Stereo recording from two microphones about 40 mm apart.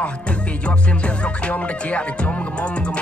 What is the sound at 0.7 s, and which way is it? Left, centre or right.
Music, left.